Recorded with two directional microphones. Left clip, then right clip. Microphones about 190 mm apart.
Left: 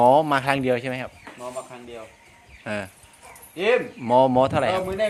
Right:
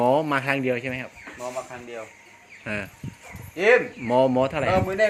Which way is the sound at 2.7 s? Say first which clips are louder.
Left 1 dB; 10° left (ahead or behind).